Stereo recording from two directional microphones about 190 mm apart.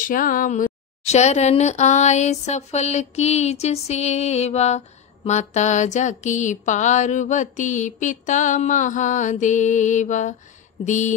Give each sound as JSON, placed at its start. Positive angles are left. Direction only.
{"t": 0.0, "sound": "speech", "side_deg": 45}